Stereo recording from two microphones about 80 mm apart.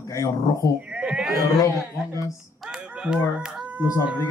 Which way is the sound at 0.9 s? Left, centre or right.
Centre.